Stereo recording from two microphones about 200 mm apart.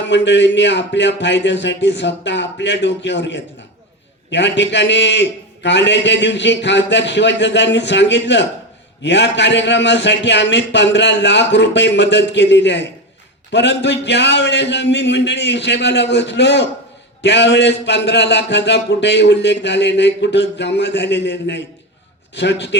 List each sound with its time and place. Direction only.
0.0 s a man's voice: 65° left (ahead or behind)